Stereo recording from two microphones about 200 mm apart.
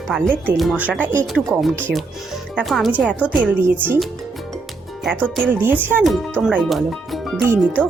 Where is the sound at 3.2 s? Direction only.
10° right (ahead or behind).